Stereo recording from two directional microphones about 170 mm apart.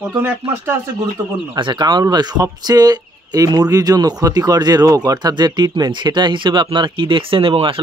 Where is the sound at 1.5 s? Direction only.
25° right (ahead or behind).